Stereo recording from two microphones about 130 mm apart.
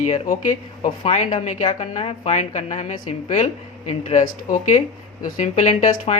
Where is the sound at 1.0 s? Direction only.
60° left (ahead or behind).